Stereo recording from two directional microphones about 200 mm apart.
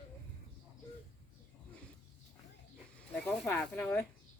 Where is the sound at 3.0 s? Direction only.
5° left (ahead or behind).